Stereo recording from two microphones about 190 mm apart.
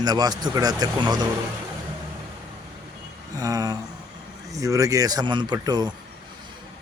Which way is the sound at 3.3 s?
20° right (ahead or behind).